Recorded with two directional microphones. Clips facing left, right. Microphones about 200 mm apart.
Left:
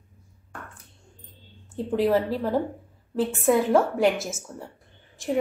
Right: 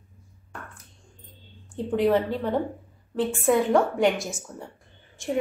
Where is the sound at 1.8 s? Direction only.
Centre (ahead or behind).